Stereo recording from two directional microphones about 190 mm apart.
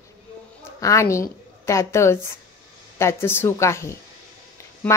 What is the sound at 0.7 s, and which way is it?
A woman's voice, 15° left (ahead or behind).